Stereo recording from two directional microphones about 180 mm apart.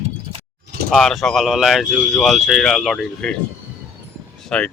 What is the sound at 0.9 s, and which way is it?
Speech, centre (ahead or behind).